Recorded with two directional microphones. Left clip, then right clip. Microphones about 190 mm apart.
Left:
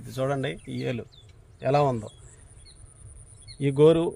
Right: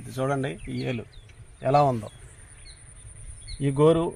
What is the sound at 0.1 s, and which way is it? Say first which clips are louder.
Speech: even; 25° left (ahead or behind).